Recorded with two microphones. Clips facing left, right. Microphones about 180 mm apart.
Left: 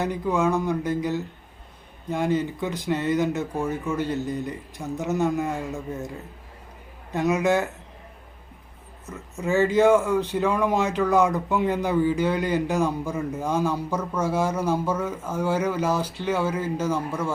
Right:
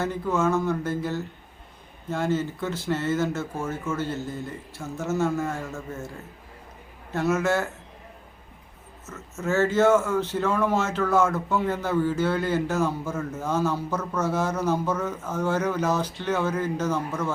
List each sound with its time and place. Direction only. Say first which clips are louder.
0.0 s a man's voice: left 1 dB; 15° left (ahead or behind)
7.1 s a man's voice: left 2 dB; 15° left (ahead or behind)
9.0 s a man's voice: left 1 dB; 15° left (ahead or behind)